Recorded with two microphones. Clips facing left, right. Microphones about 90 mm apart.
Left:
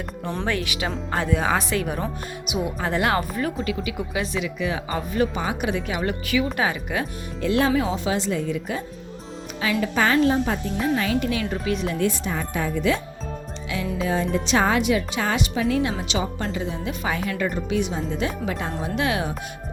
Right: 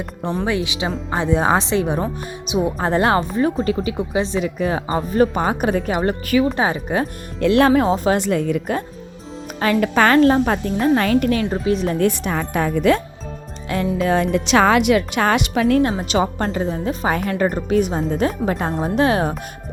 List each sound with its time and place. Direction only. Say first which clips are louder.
0.3 s a woman's voice: right 4 dB; 15° right (ahead or behind); by 7.1 s 35° right (ahead or behind)
7.3 s speech: right 7 dB; 65° right (ahead or behind)
7.7 s speech: right 7 dB; 45° right (ahead or behind)
9.8 s speech: right 6 dB; 65° right (ahead or behind)
11.6 s speech: right 6 dB; 35° right (ahead or behind)
12.0 s speech: right 5 dB; 65° right (ahead or behind)
14.0 s speech: right 5 dB; 65° right (ahead or behind); by 19.4 s 40° right (ahead or behind)